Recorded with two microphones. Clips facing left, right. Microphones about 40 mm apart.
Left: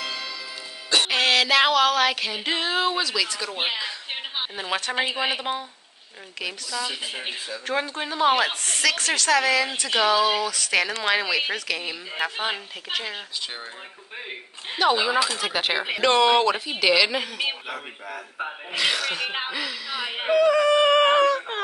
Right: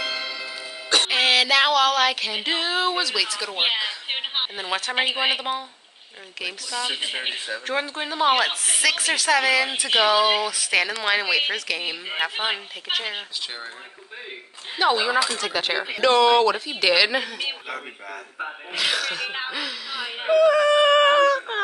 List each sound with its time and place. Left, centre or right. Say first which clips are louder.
0.0 s music: right 3 dB; centre
1.0 s a sound: right 1 dB; centre
2.4 s speech: even; centre
3.5 s speech: right 5 dB; right
4.1 s a sound: right 4 dB; right
4.6 s speech: left 3 dB; centre
4.9 s speech: right 4 dB; right
6.7 s speech: right 4 dB; right
7.6 s speech: left 1 dB; centre
12.4 s speech: right 2 dB; right
14.9 s speech: even; centre
16.8 s speech: right 1 dB; centre
17.6 s speech: right 1 dB; centre
20.2 s a sound: right 2 dB; centre